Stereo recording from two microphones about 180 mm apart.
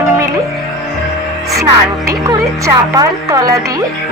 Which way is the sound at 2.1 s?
20° right (ahead or behind).